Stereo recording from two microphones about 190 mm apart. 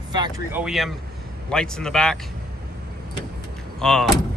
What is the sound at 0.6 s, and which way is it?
Speech, centre (ahead or behind).